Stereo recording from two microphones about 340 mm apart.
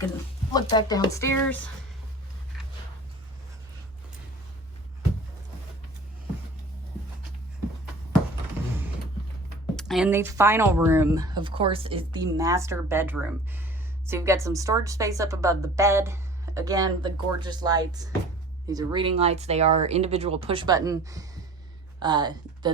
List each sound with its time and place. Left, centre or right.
0.5 s speech: centre
9.7 s a woman's voice: centre